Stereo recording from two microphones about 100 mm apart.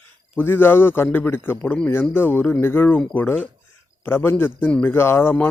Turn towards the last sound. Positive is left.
turn(degrees=25)  # may be behind; listen again after turning